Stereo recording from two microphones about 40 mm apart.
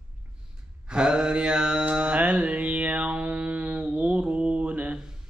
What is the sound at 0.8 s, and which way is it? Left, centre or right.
Mantra, right.